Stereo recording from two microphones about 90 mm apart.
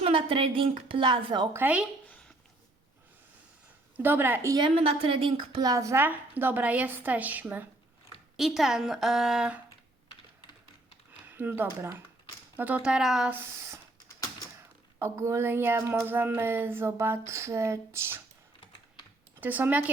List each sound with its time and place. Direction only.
0.0 s a woman's voice: 80° right; by 1.5 s 60° right (ahead or behind)
1.5 s speech: 20° right (ahead or behind)
3.9 s speech: 25° right (ahead or behind)
4.7 s a woman's voice: 90° right; by 5.6 s 70° right (ahead or behind)
5.6 s speech: 35° right (ahead or behind)
6.0 s speech: 20° right (ahead or behind)
8.4 s a woman's voice: 5° right (ahead or behind)
11.3 s speech: 20° right (ahead or behind); by 13.3 s 5° right (ahead or behind)
13.3 s speech: 30° right (ahead or behind)
14.9 s speech: 30° right (ahead or behind)
19.4 s speech: 20° right (ahead or behind)